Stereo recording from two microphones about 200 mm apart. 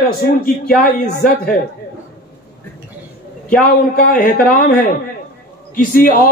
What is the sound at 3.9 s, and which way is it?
Speech, 45° left (ahead or behind).